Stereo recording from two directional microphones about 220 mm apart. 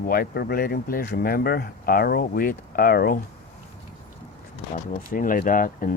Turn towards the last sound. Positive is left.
turn(degrees=40)  # may be behind; listen again after turning